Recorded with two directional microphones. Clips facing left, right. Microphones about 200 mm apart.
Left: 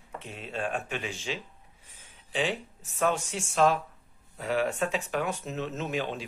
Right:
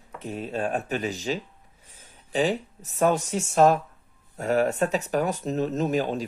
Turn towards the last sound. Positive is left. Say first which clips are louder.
# right 7 dB
turn(degrees=-40)  # may be behind; listen again after turning